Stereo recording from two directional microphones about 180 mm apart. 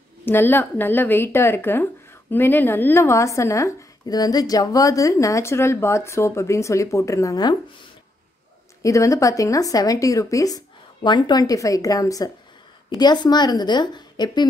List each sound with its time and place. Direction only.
0.2 s a woman's voice: 10° left (ahead or behind)
8.8 s speech: 15° left (ahead or behind)